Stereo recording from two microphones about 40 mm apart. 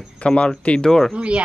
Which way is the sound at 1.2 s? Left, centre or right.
Right.